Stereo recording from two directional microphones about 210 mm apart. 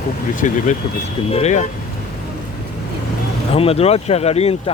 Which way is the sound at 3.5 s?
30° left (ahead or behind).